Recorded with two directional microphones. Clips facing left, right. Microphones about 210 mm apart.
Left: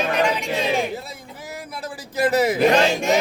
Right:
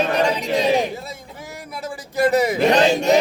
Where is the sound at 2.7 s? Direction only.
35° right (ahead or behind).